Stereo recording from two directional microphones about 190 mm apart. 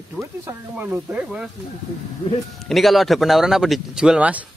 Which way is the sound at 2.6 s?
Centre (ahead or behind).